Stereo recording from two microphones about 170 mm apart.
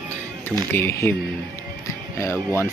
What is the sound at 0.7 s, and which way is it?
Speech, 15° left (ahead or behind).